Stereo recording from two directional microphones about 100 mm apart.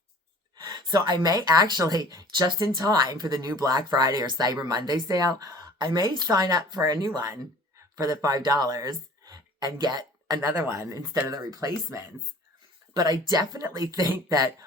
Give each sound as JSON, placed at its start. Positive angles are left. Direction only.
{"t": 0.5, "sound": "speech", "side_deg": -40}